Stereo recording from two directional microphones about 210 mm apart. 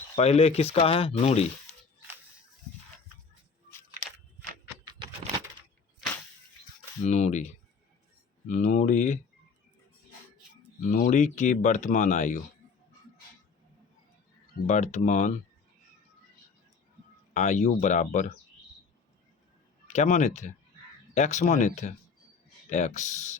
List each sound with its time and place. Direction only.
0.2 s speech: 30° left (ahead or behind)
7.0 s speech: 35° left (ahead or behind)
10.8 s speech: 35° left (ahead or behind)
14.9 s speech: 35° left (ahead or behind)
17.3 s speech: 35° left (ahead or behind)
19.9 s speech: 35° left (ahead or behind)